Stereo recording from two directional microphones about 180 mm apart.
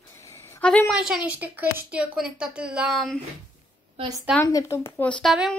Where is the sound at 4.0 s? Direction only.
30° right (ahead or behind).